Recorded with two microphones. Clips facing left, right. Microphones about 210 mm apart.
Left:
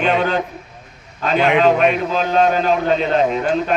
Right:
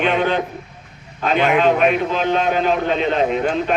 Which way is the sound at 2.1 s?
40° left (ahead or behind).